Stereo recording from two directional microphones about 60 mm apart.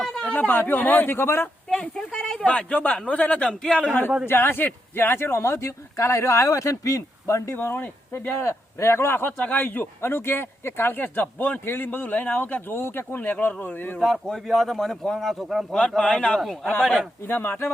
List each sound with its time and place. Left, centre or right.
0.3 s speech: left
1.8 s a man's voice: centre
4.3 s speech: left
7.5 s speech: left
9.4 s a man's voice: left
9.8 s speech: left
14.3 s speech: centre
16.0 s speech: centre
17.2 s speech: left